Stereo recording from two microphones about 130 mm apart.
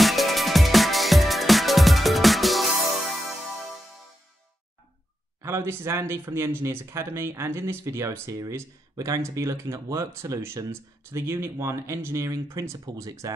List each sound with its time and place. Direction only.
0.0 s music: centre (ahead or behind)
5.4 s speech: 20° right (ahead or behind)